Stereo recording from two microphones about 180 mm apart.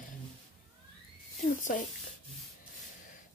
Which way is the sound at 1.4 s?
50° left (ahead or behind).